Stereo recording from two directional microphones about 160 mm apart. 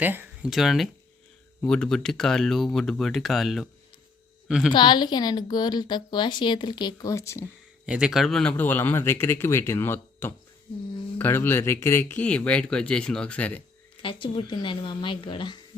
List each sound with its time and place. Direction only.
0.0 s a woman's voice: 10° right (ahead or behind)
4.7 s a woman's voice: 30° left (ahead or behind)
7.9 s a man's voice: 5° right (ahead or behind)
14.0 s speech: 35° left (ahead or behind)